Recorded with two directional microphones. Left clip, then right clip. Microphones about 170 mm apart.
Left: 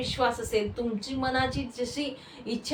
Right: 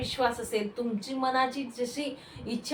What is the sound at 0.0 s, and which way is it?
A woman's voice, 5° left (ahead or behind).